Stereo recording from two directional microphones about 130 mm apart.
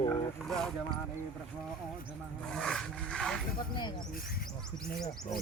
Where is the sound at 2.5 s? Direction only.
5° left (ahead or behind).